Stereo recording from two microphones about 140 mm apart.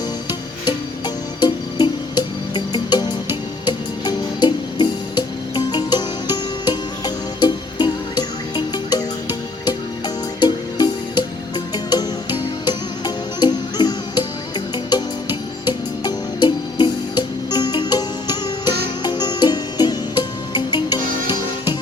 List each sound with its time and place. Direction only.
0.6 s music: 30° left (ahead or behind)
10.4 s music: 30° left (ahead or behind)
13.4 s music: 30° left (ahead or behind)